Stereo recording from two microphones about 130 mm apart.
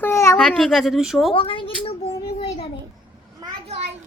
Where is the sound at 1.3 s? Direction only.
45° left (ahead or behind).